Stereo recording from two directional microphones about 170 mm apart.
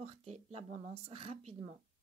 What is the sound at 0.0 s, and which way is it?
Speech, 35° right (ahead or behind).